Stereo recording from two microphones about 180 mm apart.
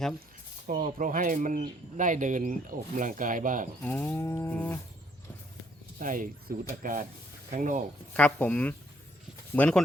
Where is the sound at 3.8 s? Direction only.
10° left (ahead or behind).